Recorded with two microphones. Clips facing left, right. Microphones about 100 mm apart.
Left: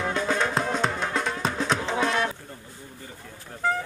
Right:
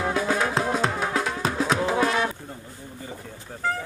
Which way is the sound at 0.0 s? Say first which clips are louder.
Right 2 dB; 5° right (ahead or behind).